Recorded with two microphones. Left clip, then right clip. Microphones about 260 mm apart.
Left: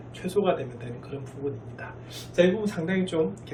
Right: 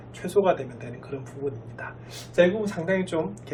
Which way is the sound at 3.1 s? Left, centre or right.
Right.